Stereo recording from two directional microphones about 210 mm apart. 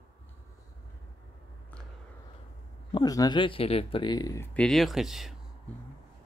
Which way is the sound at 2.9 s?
20° left (ahead or behind).